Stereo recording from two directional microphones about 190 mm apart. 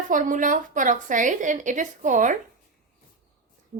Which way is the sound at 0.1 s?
45° right (ahead or behind).